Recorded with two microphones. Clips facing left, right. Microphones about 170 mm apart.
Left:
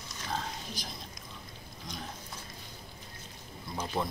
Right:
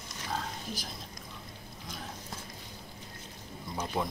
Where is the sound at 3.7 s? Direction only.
5° right (ahead or behind).